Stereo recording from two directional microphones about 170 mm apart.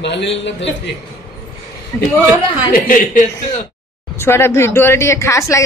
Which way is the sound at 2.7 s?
55° left (ahead or behind).